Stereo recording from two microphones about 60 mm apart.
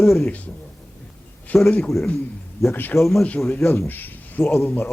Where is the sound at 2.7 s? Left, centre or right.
Left.